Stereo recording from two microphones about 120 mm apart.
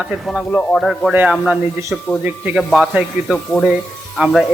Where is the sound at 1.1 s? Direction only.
10° right (ahead or behind).